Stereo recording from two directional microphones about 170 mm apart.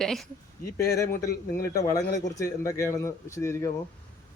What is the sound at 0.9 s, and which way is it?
A man's voice, 20° left (ahead or behind).